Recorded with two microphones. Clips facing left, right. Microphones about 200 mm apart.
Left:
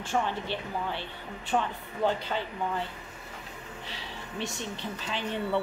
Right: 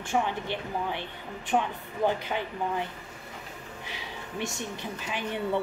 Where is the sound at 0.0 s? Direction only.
15° right (ahead or behind).